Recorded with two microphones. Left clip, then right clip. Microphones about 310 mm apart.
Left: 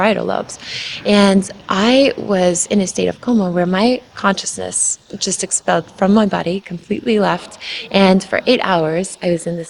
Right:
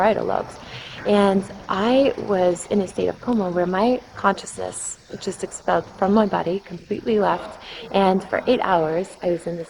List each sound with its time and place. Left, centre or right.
0.0 s a woman's voice: left